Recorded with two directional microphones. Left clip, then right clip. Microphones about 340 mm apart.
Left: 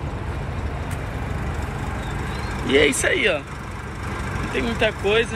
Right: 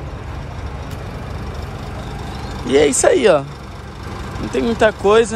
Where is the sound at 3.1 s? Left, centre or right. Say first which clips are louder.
Right 8 dB; right.